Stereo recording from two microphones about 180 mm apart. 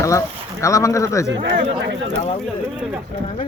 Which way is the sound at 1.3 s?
85° right.